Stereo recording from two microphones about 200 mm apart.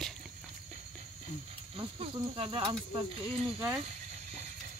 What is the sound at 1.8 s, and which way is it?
Speech, 30° right (ahead or behind).